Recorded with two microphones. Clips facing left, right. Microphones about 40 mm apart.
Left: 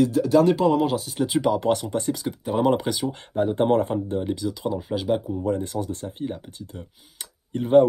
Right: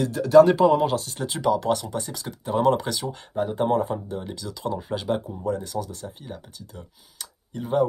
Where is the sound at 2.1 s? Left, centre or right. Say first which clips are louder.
Left 1 dB; centre.